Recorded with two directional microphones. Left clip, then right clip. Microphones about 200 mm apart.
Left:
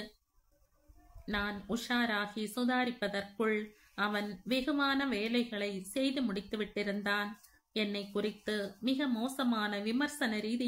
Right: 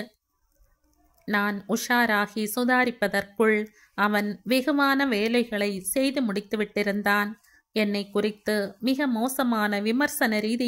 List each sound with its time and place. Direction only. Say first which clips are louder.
1.2 s speech: right 11 dB; 45° right (ahead or behind)